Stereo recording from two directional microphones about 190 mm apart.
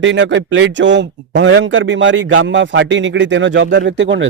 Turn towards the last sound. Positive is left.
turn(degrees=-70)  # may be behind; listen again after turning